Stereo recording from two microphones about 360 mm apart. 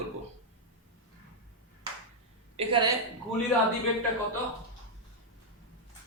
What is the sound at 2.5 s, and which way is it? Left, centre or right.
Speech, centre.